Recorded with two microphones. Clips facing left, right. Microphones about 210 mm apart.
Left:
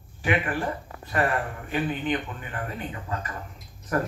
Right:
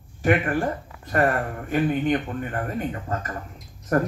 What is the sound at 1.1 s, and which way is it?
Speech, 45° right (ahead or behind).